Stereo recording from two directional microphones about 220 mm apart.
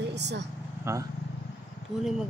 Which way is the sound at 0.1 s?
50° right (ahead or behind).